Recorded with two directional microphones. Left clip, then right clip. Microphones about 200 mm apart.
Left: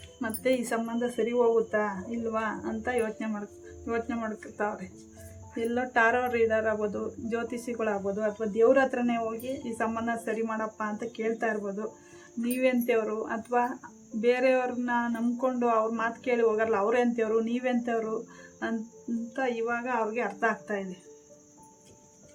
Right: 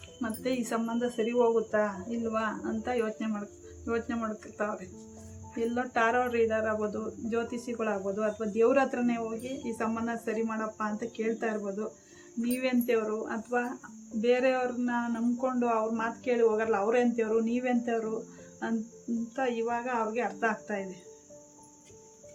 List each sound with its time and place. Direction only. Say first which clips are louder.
0.2 s speech: left 5 dB; 35° left (ahead or behind)
19.4 s speech: left 1 dB; 35° left (ahead or behind)